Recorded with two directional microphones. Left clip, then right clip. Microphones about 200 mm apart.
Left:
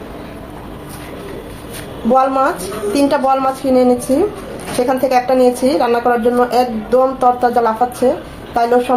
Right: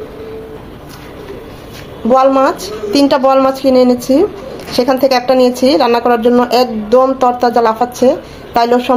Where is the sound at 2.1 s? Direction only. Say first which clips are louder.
Right 4 dB; 45° right (ahead or behind).